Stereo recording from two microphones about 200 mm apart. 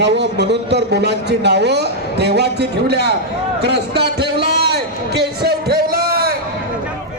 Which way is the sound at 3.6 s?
55° right (ahead or behind).